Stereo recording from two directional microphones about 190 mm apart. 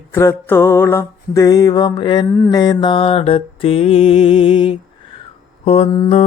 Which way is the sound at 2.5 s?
20° left (ahead or behind).